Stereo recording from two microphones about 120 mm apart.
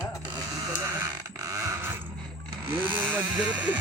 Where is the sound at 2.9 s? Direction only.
15° right (ahead or behind).